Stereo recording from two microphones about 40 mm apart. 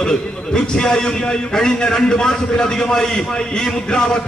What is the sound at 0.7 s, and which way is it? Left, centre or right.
A man's voice, centre.